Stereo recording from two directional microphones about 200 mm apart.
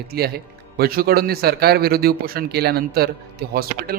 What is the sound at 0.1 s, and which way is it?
Speech, 50° right (ahead or behind).